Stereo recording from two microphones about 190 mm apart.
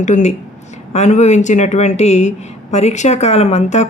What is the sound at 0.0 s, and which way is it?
Speech, 40° left (ahead or behind).